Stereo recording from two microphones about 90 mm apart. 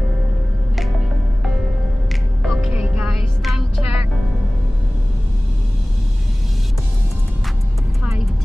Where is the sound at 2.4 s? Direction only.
5° right (ahead or behind).